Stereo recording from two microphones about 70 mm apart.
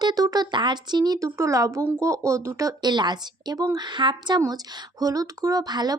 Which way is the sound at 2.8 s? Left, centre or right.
Right.